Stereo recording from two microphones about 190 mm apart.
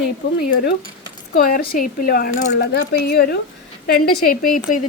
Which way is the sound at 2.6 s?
55° left (ahead or behind).